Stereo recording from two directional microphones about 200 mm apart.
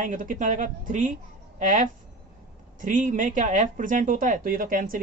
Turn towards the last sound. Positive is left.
turn(degrees=-45)  # may be behind; listen again after turning